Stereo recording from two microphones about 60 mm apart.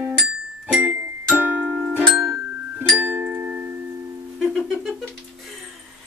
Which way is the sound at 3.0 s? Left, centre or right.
Right.